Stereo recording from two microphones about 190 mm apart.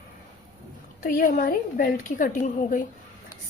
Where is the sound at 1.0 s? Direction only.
45° left (ahead or behind).